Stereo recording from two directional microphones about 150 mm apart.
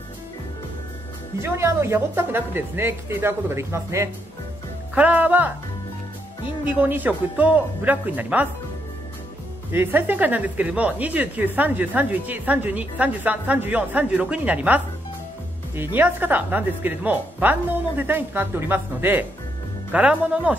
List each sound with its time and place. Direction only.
1.4 s speech: 20° right (ahead or behind)
6.6 s speech: 10° right (ahead or behind)
9.7 s speech: 15° right (ahead or behind)